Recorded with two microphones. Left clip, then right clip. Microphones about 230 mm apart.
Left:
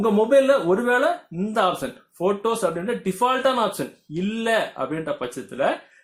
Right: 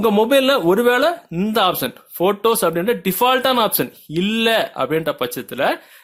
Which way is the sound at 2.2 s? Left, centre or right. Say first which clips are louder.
Right 5 dB; right.